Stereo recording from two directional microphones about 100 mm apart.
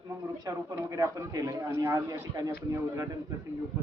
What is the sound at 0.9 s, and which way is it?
Speech, 35° right (ahead or behind).